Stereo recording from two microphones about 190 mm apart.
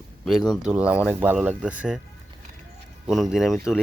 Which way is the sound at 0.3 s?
Centre (ahead or behind).